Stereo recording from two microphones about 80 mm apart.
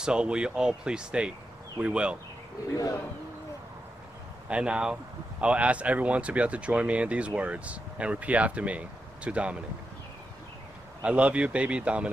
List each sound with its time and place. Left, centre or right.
0.0 s speech: centre
4.5 s speech: centre
11.0 s speech: centre